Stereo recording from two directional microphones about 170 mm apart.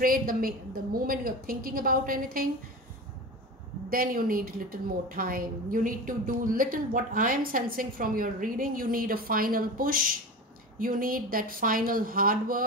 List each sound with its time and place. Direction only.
0.0 s a woman's voice: 55° right (ahead or behind)
3.9 s a woman's voice: 55° right (ahead or behind)